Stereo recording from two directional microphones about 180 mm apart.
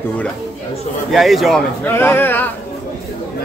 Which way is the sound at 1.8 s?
10° left (ahead or behind).